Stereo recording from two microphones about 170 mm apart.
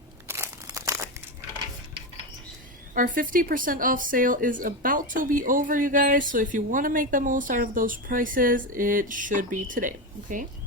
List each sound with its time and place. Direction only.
0.3 s crumpling: 15° right (ahead or behind)
2.9 s a woman's voice: 50° right (ahead or behind)